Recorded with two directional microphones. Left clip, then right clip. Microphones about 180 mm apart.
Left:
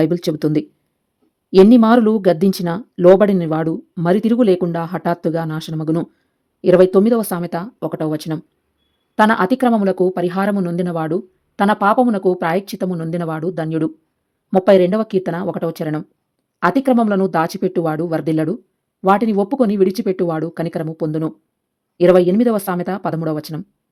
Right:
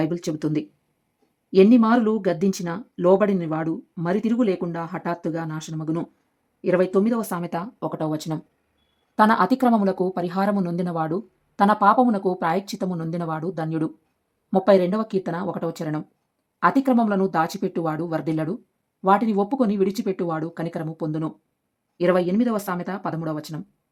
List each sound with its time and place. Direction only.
0.0 s speech: 20° left (ahead or behind)
7.4 s speech: 10° left (ahead or behind)